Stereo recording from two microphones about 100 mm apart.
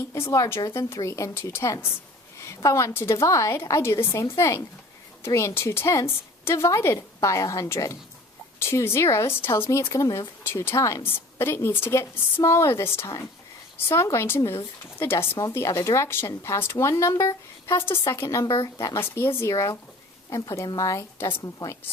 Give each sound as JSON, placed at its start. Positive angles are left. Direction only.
{"t": 0.1, "sound": "speech", "side_deg": 30}
{"t": 9.9, "sound": "speech", "side_deg": 35}